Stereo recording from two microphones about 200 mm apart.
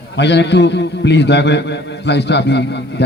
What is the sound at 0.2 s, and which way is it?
A man's voice, 60° left (ahead or behind).